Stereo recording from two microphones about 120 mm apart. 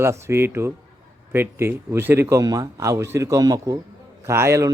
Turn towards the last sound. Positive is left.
turn(degrees=-25)  # may be behind; listen again after turning